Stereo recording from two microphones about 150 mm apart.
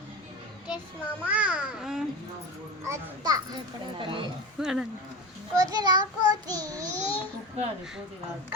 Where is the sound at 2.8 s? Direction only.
20° right (ahead or behind).